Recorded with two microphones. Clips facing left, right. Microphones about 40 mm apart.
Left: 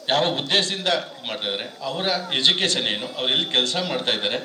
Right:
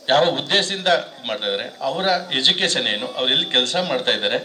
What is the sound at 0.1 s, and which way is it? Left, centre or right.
A man's voice, right.